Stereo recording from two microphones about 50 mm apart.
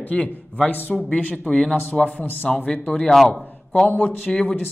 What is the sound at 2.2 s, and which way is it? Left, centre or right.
Speech, left.